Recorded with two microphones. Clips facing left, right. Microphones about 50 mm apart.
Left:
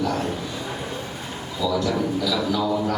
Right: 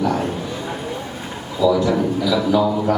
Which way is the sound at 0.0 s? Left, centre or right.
Centre.